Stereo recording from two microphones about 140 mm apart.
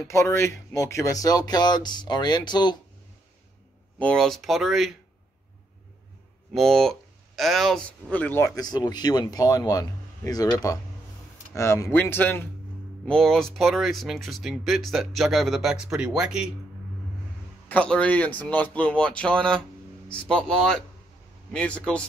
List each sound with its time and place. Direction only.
0.1 s speech: 20° left (ahead or behind)
4.0 s speech: 5° left (ahead or behind)
6.5 s speech: centre (ahead or behind)
8.5 s speech: 30° left (ahead or behind)
13.0 s speech: 5° left (ahead or behind)
17.6 s speech: 10° left (ahead or behind)